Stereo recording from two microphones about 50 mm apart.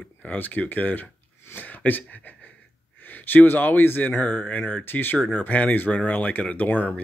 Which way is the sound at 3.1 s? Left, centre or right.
Left.